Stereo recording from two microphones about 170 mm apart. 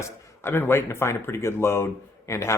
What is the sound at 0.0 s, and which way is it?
Speech, 10° left (ahead or behind).